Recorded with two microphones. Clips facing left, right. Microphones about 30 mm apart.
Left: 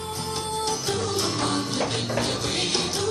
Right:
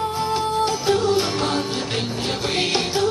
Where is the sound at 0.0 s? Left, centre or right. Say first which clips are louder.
Right 8 dB; right.